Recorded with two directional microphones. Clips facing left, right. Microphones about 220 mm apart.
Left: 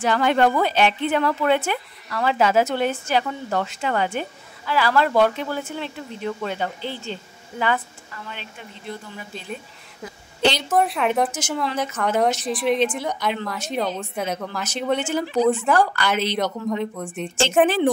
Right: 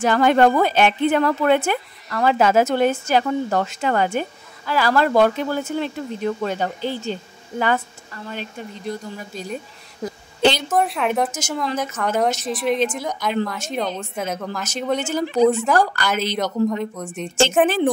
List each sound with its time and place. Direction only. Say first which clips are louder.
0.0 s a woman's voice: right 3 dB; 45° right (ahead or behind)
10.0 s a sound: right 3 dB; 50° right (ahead or behind)
10.7 s a woman's voice: even; centre (ahead or behind)
15.0 s speech: right 1 dB; 40° right (ahead or behind)
15.2 s a woman's voice: right 4 dB; centre (ahead or behind)
15.8 s a woman's voice: even; 45° right (ahead or behind)
16.3 s a woman's voice: right 3 dB; centre (ahead or behind)